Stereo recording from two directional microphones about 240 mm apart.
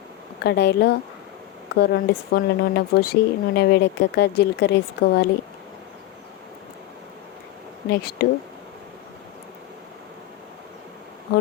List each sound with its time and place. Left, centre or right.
0.4 s speech: left
7.9 s speech: left